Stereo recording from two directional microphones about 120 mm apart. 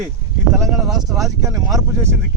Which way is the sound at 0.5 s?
5° right (ahead or behind).